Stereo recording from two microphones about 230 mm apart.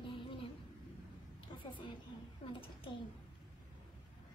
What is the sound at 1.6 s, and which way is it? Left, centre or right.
Speech, left.